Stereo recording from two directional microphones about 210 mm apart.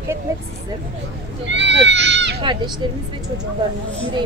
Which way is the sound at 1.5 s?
60° right (ahead or behind).